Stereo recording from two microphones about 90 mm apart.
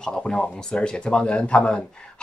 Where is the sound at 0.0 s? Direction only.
10° left (ahead or behind).